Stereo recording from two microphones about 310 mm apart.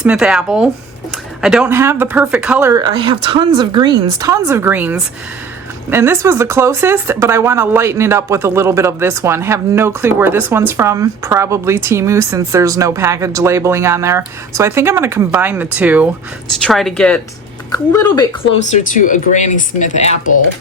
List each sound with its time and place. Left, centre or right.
0.0 s a woman's voice: centre
18.7 s speech: left